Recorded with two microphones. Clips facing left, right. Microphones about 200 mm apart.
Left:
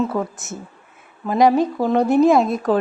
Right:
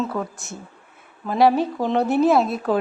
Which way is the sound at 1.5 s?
15° left (ahead or behind).